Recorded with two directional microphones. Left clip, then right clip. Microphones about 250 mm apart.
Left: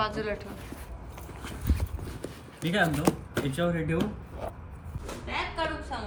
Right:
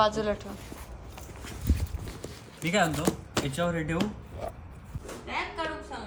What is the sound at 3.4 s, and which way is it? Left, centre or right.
Speech, right.